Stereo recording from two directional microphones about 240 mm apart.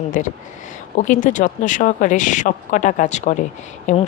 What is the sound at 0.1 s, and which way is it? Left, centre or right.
Speech, left.